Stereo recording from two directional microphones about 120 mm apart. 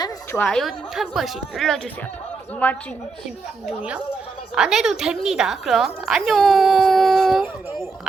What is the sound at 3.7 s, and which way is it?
A woman's voice, 10° right (ahead or behind).